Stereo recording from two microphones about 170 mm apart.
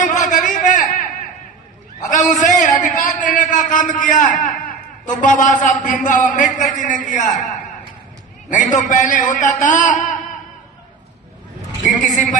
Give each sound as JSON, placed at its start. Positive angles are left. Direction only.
{"t": 0.0, "sound": "a sound", "side_deg": 45}
{"t": 8.7, "sound": "a man's voice", "side_deg": 45}
{"t": 11.8, "sound": "a man's voice", "side_deg": 45}